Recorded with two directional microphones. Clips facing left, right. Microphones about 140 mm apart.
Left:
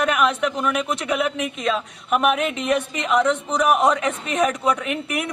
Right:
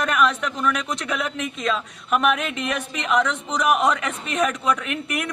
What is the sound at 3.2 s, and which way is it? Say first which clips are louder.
A man's voice: left 3 dB; 15° left (ahead or behind).